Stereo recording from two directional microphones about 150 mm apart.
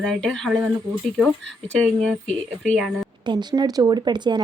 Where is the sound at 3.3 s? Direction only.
30° right (ahead or behind).